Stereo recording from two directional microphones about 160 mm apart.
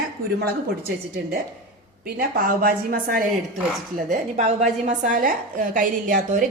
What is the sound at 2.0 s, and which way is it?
A woman's voice, 65° right (ahead or behind).